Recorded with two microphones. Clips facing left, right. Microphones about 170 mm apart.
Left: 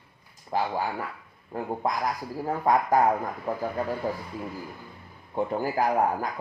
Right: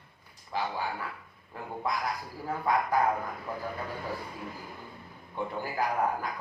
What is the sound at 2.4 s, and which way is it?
Speech, 45° left (ahead or behind).